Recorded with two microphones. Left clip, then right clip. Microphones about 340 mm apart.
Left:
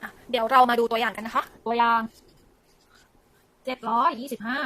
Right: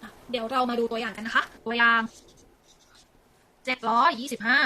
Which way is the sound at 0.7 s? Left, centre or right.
Left.